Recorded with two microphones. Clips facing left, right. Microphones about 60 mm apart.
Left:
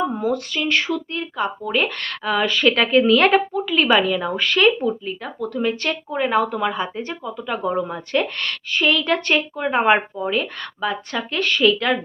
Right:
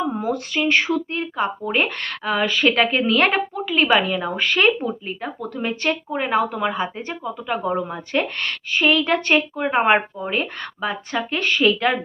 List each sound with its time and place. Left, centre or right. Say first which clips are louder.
0.1 s a woman's voice: left 1 dB; centre